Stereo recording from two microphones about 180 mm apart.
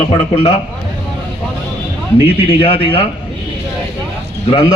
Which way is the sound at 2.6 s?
30° left (ahead or behind).